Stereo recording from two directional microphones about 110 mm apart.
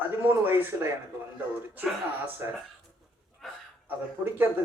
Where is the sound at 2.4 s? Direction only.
25° right (ahead or behind).